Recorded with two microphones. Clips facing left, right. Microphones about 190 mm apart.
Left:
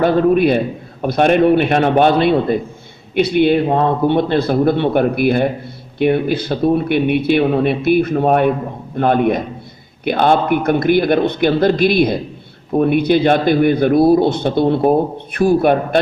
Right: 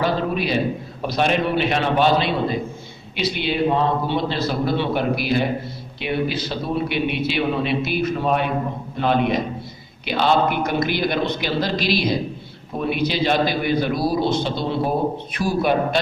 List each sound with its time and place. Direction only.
0.0 s a man's voice: 55° left (ahead or behind)